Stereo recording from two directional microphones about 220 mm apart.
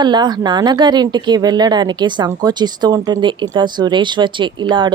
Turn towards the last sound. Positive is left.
turn(degrees=-20)  # may be behind; listen again after turning